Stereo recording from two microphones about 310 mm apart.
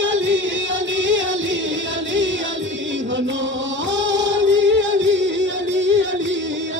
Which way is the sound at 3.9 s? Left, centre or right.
Right.